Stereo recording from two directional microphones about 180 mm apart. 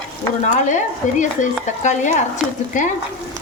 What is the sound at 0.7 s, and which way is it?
Speech, 45° left (ahead or behind).